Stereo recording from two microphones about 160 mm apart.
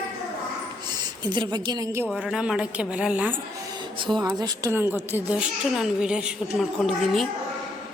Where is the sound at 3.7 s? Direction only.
30° right (ahead or behind); by 7.2 s centre (ahead or behind).